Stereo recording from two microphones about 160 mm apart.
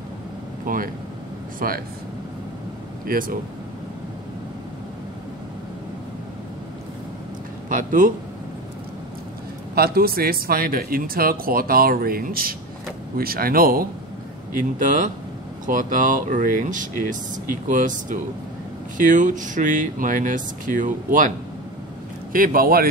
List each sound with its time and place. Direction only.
0.7 s speech: 55° right (ahead or behind)
3.1 s speech: 60° right (ahead or behind)
7.7 s speech: 55° right (ahead or behind)
9.8 s speech: 70° right (ahead or behind)
22.3 s speech: 60° right (ahead or behind)